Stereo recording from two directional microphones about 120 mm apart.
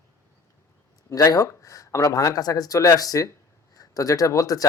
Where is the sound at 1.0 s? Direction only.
30° left (ahead or behind).